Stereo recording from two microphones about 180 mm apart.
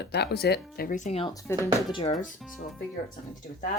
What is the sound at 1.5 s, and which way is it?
Speech, 15° left (ahead or behind).